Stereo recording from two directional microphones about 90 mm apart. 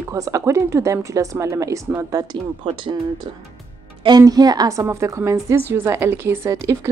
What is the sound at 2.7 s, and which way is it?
Speech, 70° right (ahead or behind).